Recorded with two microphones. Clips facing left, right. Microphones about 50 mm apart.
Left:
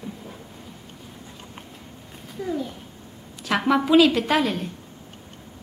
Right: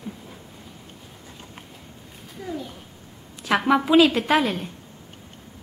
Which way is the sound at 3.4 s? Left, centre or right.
Centre.